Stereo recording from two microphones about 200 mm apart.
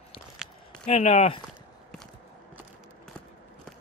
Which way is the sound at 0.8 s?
30° left (ahead or behind).